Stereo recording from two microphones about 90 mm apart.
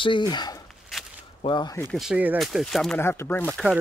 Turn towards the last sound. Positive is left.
turn(degrees=20)  # may be behind; listen again after turning